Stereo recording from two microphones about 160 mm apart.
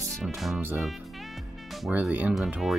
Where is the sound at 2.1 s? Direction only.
10° right (ahead or behind).